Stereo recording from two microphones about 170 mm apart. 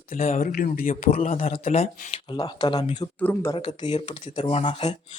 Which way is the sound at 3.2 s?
10° left (ahead or behind).